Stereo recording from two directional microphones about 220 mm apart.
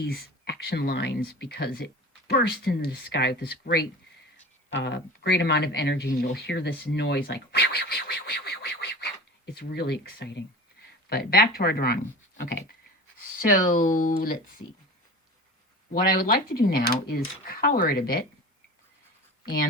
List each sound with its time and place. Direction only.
0.0 s speech: 45° left (ahead or behind)
15.9 s speech: 40° left (ahead or behind)